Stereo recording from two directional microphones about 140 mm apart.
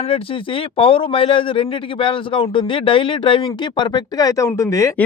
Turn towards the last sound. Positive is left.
turn(degrees=20)  # may be behind; listen again after turning